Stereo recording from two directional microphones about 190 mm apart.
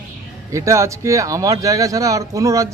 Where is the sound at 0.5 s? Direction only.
15° right (ahead or behind).